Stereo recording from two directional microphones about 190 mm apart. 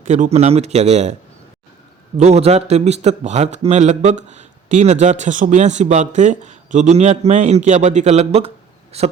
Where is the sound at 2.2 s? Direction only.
35° right (ahead or behind).